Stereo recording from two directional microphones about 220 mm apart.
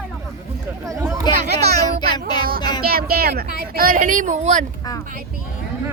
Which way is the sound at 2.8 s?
45° right (ahead or behind).